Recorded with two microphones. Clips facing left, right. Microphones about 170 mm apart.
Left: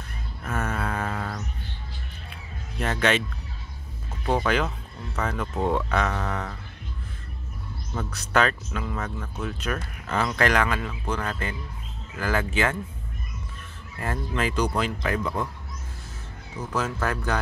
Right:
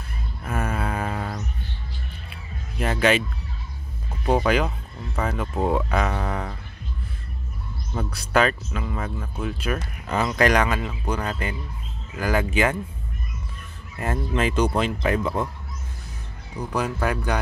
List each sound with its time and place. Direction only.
0.5 s a sound: 10° right (ahead or behind)
2.8 s speech: 10° right (ahead or behind)
4.3 s speech: 15° right (ahead or behind)
7.9 s speech: 15° right (ahead or behind)
13.9 s speech: 20° right (ahead or behind)
16.5 s speech: 15° right (ahead or behind)